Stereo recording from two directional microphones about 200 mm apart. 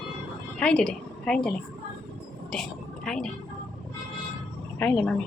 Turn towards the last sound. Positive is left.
turn(degrees=5)  # may be behind; listen again after turning